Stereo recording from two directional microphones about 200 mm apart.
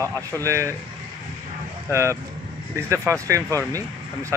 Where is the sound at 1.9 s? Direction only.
15° right (ahead or behind).